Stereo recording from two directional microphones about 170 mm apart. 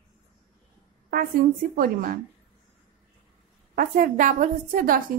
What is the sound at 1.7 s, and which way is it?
Speech, 55° right (ahead or behind).